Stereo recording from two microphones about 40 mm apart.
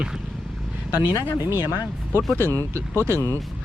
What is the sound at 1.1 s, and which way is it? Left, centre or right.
Speech, right.